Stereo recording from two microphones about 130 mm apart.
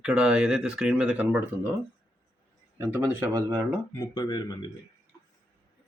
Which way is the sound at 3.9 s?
30° left (ahead or behind).